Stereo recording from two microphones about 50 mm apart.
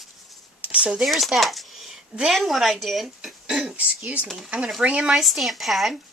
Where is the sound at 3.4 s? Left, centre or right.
Centre.